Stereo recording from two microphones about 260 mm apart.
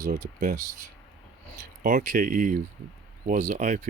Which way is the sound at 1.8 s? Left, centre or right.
Right.